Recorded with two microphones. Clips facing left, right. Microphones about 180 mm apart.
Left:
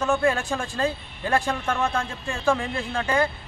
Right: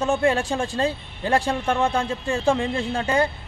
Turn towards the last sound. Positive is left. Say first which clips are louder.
# right 2 dB
turn(degrees=-30)  # may be behind; listen again after turning